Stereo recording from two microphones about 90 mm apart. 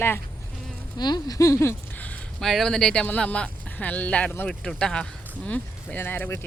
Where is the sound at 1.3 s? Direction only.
35° left (ahead or behind).